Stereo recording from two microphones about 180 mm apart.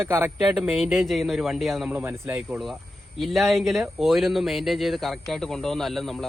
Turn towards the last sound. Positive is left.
turn(degrees=0)  # may be behind; listen again after turning